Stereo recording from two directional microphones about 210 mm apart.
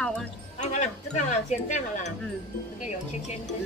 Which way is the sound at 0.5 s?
35° left (ahead or behind).